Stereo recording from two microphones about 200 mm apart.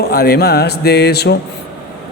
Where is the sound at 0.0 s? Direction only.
50° left (ahead or behind).